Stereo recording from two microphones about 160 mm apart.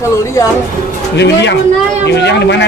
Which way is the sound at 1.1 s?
90° left.